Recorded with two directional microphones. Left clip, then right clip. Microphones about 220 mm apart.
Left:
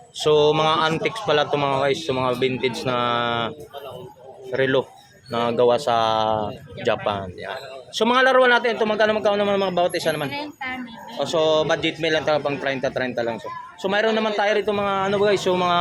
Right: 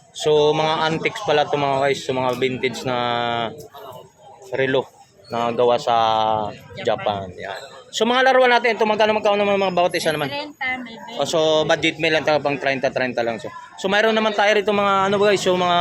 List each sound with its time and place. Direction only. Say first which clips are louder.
0.2 s speech: right 1 dB; centre (ahead or behind)
4.5 s a man's voice: even; centre (ahead or behind)
10.2 s speech: right 4 dB; 30° right (ahead or behind)
11.2 s a man's voice: right 1 dB; 15° right (ahead or behind)